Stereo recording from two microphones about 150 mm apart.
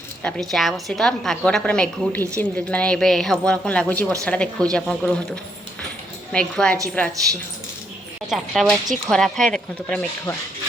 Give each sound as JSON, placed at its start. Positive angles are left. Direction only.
{"t": 0.2, "sound": "a woman's voice", "side_deg": 5}
{"t": 8.3, "sound": "a woman's voice", "side_deg": 0}